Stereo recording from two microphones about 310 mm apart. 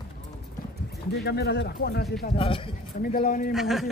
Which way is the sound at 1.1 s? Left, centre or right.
Left.